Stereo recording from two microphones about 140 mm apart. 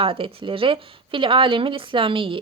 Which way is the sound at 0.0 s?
40° right (ahead or behind).